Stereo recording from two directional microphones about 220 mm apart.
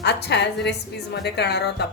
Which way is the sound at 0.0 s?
50° left (ahead or behind).